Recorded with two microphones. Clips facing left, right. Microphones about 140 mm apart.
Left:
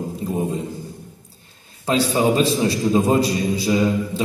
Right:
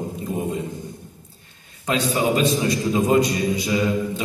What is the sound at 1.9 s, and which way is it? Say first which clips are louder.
A man's voice: left 3 dB; 30° left (ahead or behind).